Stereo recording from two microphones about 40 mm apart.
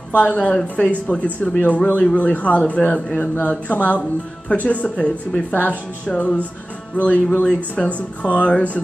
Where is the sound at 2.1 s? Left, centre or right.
Left.